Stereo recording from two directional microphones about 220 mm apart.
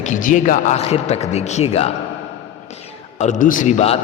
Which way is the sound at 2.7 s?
30° left (ahead or behind).